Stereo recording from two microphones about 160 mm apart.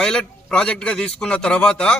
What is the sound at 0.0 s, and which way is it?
A man's voice, 5° left (ahead or behind).